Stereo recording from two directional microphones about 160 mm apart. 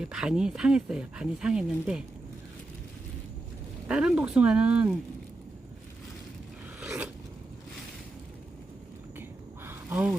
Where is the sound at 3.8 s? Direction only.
5° right (ahead or behind).